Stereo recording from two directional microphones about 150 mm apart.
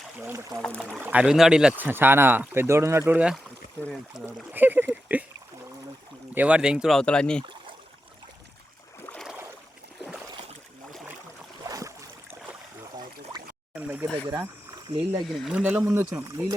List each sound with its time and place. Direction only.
0.2 s speech: 20° right (ahead or behind)
0.6 s speech: 5° left (ahead or behind)
0.9 s speech: 10° right (ahead or behind)
4.5 s a sound: 10° right (ahead or behind)
6.3 s speech: 10° right (ahead or behind)
11.7 s boat: 20° right (ahead or behind)
13.7 s a sound: 10° right (ahead or behind)
14.3 s speech: 25° right (ahead or behind)
15.2 s speech: centre (ahead or behind)
15.5 s speech: 10° right (ahead or behind)